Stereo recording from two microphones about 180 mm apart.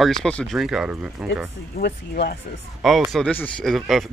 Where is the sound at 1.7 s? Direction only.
60° left (ahead or behind).